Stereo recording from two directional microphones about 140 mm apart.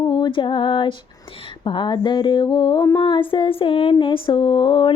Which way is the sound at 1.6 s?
35° left (ahead or behind).